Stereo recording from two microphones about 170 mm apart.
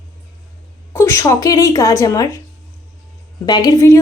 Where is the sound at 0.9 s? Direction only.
15° left (ahead or behind).